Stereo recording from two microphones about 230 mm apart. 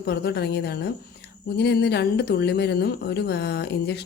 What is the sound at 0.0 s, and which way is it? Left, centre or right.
Speech, left.